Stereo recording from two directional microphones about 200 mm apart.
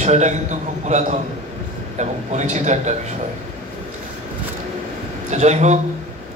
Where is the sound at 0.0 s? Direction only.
35° right (ahead or behind).